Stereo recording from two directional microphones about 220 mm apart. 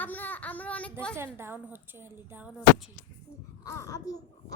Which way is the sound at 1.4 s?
10° right (ahead or behind).